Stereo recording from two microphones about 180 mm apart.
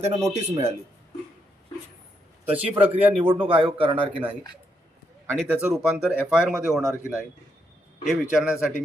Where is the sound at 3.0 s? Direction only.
10° right (ahead or behind).